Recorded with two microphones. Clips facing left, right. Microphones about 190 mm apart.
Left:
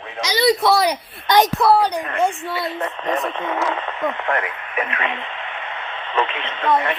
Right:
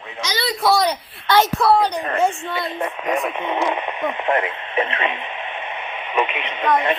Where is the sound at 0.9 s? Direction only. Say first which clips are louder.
Left 1 dB; 15° left (ahead or behind).